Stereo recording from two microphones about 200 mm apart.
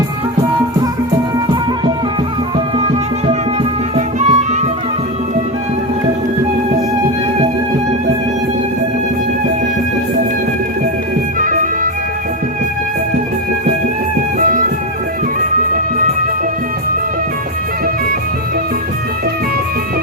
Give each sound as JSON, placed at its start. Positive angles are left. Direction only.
{"t": 3.2, "sound": "music", "side_deg": -30}
{"t": 11.3, "sound": "music", "side_deg": -40}